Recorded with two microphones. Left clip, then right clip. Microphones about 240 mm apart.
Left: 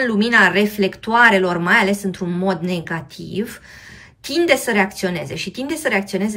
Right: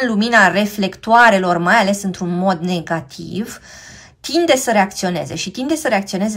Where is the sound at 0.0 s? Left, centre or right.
Centre.